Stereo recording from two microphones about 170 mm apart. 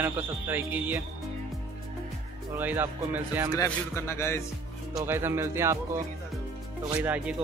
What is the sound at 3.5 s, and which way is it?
Speech, 15° left (ahead or behind).